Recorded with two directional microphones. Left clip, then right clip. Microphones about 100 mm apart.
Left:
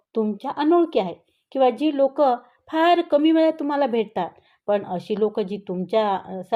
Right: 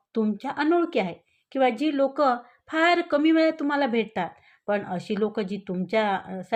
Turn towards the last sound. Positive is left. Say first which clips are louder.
# left 3 dB
turn(degrees=25)  # may be behind; listen again after turning